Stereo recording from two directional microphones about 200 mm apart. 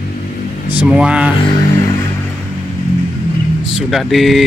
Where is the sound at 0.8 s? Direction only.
5° right (ahead or behind).